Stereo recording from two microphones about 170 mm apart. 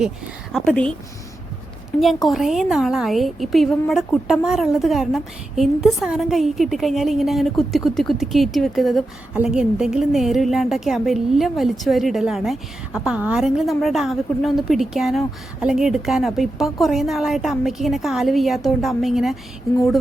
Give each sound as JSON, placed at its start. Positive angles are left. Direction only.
{"t": 0.5, "sound": "speech", "side_deg": 5}
{"t": 2.2, "sound": "a woman's voice", "side_deg": 0}